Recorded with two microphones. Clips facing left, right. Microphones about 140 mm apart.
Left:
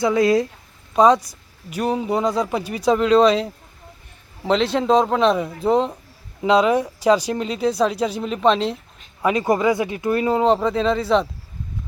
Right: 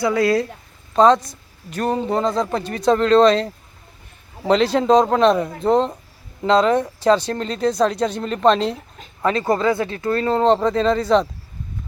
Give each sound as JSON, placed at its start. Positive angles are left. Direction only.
{"t": 0.0, "sound": "a man's voice", "side_deg": 20}
{"t": 9.2, "sound": "a man's voice", "side_deg": 15}